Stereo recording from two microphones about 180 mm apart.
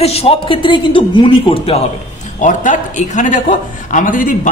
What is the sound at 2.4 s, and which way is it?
Speech, 45° left (ahead or behind).